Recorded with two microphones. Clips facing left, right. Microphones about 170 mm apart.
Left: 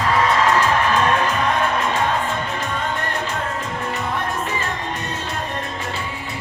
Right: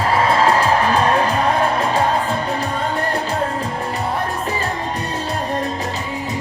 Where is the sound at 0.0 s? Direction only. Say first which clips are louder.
Right 2 dB; 30° right (ahead or behind).